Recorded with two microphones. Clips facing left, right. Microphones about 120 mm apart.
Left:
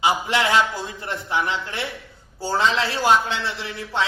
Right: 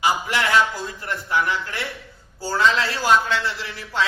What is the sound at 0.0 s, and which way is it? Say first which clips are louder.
A man's voice: left 1 dB; 20° left (ahead or behind).